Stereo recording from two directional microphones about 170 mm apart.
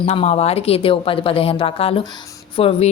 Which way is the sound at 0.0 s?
35° left (ahead or behind).